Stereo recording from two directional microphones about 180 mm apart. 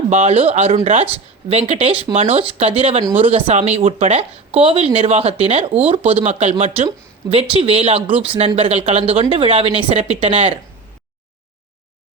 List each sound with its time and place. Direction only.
0.1 s speech: 35° right (ahead or behind)